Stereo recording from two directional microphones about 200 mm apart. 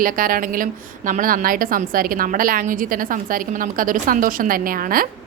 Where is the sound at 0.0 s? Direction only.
45° right (ahead or behind).